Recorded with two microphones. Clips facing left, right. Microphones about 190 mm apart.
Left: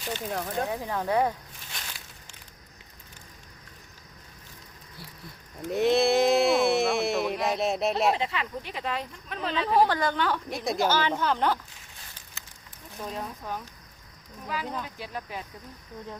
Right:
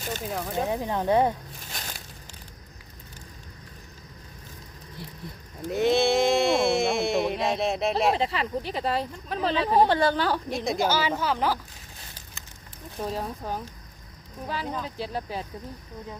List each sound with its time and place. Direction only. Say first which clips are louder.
0.3 s speech: right 2 dB; 5° right (ahead or behind)
0.7 s speech: right 6 dB; 20° right (ahead or behind)
1.7 s a sound: right 3 dB; 40° right (ahead or behind)
5.6 s a sound: even; centre (ahead or behind)
7.4 s speech: right 1 dB; centre (ahead or behind)
8.1 s speech: right 4 dB; 35° right (ahead or behind)
10.5 s speech: right 1 dB; centre (ahead or behind)
13.0 s speech: right 5 dB; 30° right (ahead or behind)